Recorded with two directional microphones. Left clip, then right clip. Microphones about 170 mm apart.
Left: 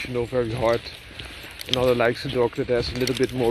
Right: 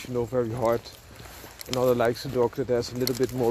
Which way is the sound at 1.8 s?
20° right (ahead or behind).